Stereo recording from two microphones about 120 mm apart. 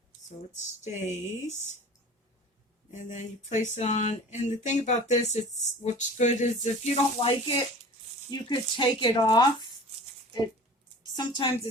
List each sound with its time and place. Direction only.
0.9 s speech: 75° left (ahead or behind)
2.9 s a sound: 85° left
7.2 s a woman's voice: 50° left (ahead or behind)
11.1 s a woman's voice: 40° left (ahead or behind)